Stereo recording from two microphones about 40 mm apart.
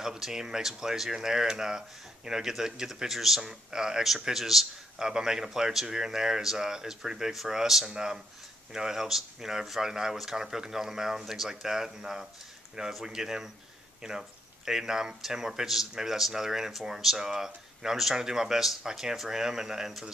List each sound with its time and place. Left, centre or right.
0.0 s a man's voice: centre
4.9 s speech: centre